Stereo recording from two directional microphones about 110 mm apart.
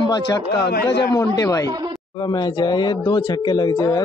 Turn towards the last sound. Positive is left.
turn(degrees=40)  # may be behind; listen again after turning